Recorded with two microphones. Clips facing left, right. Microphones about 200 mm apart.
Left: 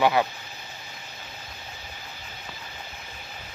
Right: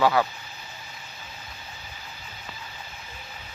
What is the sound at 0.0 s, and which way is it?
Speech, 20° left (ahead or behind).